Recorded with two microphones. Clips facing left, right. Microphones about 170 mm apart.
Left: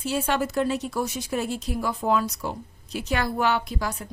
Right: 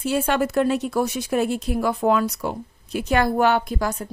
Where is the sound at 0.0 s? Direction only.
55° right (ahead or behind).